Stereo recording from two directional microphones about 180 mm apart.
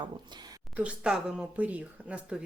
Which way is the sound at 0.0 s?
25° right (ahead or behind).